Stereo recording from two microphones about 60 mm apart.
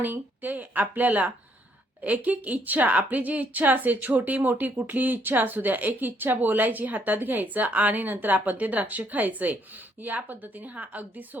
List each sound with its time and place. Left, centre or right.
0.0 s speech: right